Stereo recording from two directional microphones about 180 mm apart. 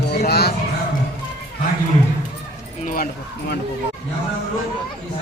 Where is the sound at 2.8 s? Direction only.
50° left (ahead or behind).